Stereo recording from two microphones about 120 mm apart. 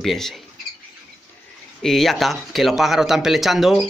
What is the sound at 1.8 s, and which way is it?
Speech, centre (ahead or behind).